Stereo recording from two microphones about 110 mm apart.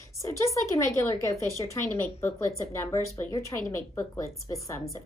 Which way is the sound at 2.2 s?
25° left (ahead or behind).